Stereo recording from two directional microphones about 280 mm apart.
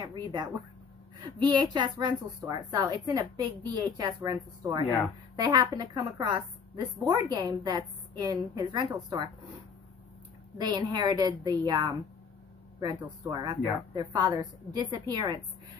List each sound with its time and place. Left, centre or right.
0.0 s speech: centre
10.6 s speech: centre